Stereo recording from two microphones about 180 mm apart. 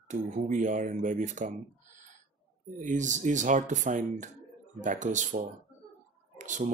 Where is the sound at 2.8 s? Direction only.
45° right (ahead or behind).